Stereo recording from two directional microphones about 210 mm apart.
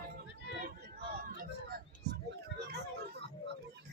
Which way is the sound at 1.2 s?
40° right (ahead or behind).